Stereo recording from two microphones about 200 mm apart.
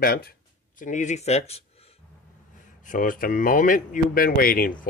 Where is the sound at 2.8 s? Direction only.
40° left (ahead or behind).